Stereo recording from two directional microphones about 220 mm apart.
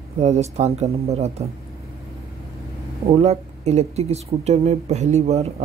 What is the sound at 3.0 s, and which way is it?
Speech, 25° right (ahead or behind).